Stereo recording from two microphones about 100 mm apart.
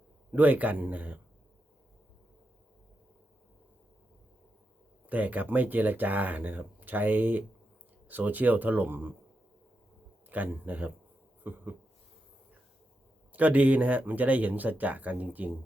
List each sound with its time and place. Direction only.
0.3 s speech: 15° right (ahead or behind)
5.0 s speech: 15° right (ahead or behind)
10.2 s speech: 15° right (ahead or behind)
11.4 s a sound: 20° right (ahead or behind)
13.3 s speech: 15° right (ahead or behind)